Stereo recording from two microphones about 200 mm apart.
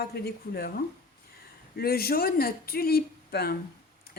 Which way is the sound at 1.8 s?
50° left (ahead or behind).